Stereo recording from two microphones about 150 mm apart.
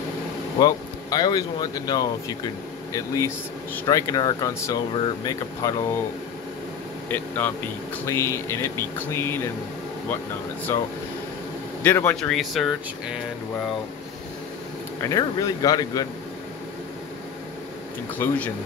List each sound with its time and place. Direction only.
0.6 s speech: 25° left (ahead or behind)
7.1 s speech: 10° left (ahead or behind)
10.7 s speech: 20° left (ahead or behind)
12.2 s speech: centre (ahead or behind)
15.0 s speech: 25° left (ahead or behind)
18.1 s speech: 10° left (ahead or behind)